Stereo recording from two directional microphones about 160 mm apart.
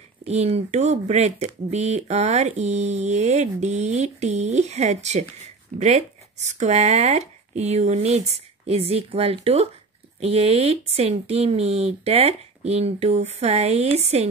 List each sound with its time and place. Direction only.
0.2 s speech: 40° right (ahead or behind)